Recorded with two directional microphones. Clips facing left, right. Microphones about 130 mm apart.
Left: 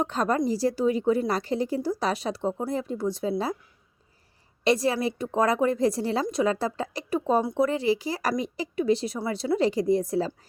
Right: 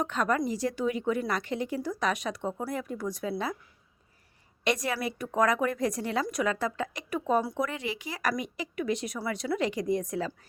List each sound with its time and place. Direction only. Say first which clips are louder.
0.0 s a woman's voice: left 3 dB; 35° left (ahead or behind)
4.6 s a woman's voice: left 6 dB; 30° left (ahead or behind)